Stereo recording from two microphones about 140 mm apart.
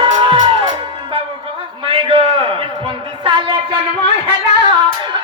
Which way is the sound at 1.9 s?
40° right (ahead or behind).